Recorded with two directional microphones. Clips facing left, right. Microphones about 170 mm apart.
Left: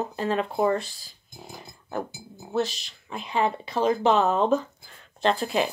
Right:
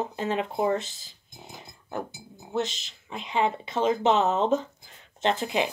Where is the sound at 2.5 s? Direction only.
20° right (ahead or behind).